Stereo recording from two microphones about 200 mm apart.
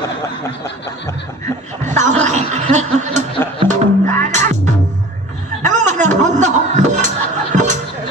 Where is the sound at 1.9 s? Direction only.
35° right (ahead or behind).